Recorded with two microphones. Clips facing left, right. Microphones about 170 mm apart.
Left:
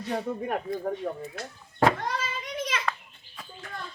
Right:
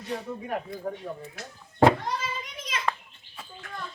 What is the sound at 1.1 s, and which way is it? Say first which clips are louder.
Speech: left 4 dB; 60° left (ahead or behind).